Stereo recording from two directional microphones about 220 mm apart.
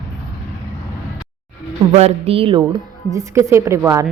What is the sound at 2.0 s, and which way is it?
Speech, 30° right (ahead or behind).